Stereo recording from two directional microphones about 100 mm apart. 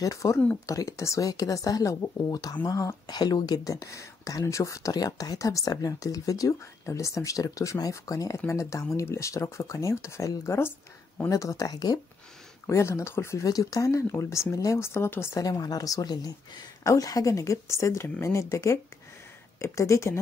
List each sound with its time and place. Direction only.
0.0 s speech: 30° left (ahead or behind)
12.6 s speech: 30° left (ahead or behind)
15.3 s speech: 35° left (ahead or behind)